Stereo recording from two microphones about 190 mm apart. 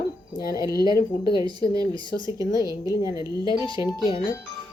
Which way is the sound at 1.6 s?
55° left (ahead or behind).